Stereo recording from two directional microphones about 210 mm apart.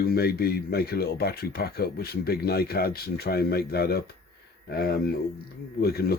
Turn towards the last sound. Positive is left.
turn(degrees=45)  # may be behind; listen again after turning